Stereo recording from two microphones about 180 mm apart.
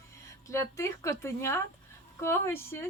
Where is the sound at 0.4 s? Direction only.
15° left (ahead or behind).